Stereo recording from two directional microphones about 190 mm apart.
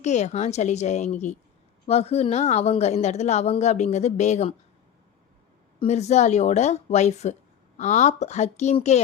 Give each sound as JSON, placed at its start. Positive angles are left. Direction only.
{"t": 0.0, "sound": "a woman's voice", "side_deg": 35}
{"t": 5.8, "sound": "a woman's voice", "side_deg": 35}